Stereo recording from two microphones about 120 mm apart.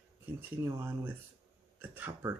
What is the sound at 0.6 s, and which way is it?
Speech, 25° right (ahead or behind).